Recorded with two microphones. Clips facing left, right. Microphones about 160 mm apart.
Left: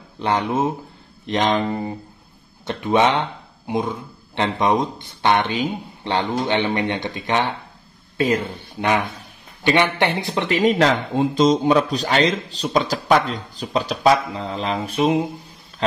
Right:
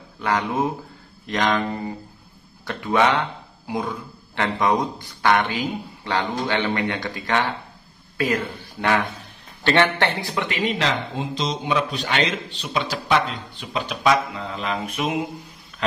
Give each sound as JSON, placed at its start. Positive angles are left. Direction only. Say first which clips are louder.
{"t": 0.2, "sound": "speech", "louder": "left 2 dB", "side_deg": 25}
{"t": 10.3, "sound": "speech", "louder": "left 6 dB", "side_deg": 35}